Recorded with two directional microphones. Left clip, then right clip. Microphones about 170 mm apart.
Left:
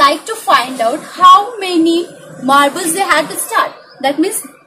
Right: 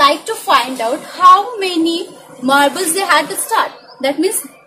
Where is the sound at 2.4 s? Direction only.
35° right (ahead or behind).